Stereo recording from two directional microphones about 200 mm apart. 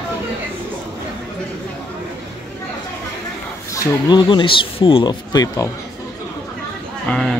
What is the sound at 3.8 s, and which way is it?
Speech, 20° left (ahead or behind).